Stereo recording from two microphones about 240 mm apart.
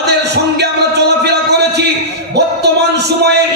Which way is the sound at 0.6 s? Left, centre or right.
Right.